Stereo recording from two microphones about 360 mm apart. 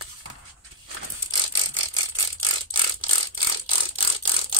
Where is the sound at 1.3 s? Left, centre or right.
Right.